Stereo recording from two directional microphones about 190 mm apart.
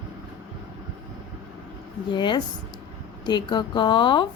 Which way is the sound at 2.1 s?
25° left (ahead or behind).